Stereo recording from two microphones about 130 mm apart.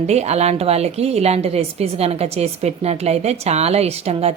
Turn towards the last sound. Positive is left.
turn(degrees=-50)  # may be behind; listen again after turning